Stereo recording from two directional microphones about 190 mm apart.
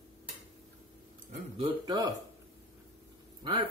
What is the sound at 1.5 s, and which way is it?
Speech, 25° right (ahead or behind).